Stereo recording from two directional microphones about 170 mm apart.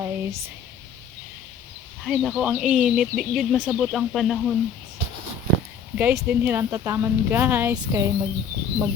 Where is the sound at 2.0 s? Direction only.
Centre (ahead or behind).